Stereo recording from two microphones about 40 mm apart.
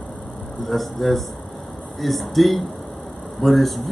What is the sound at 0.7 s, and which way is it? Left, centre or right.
Speech, centre.